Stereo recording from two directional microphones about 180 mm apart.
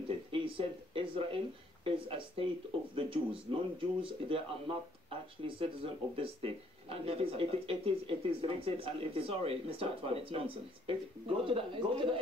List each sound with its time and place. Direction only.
0.3 s speech: 30° right (ahead or behind)
5.6 s speech: 30° right (ahead or behind)